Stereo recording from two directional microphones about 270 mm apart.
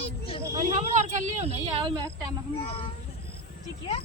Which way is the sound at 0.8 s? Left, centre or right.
Right.